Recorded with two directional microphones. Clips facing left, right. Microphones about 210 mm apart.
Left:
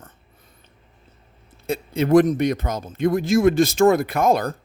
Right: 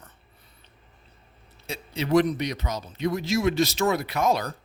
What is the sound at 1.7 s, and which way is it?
Speech, 50° left (ahead or behind).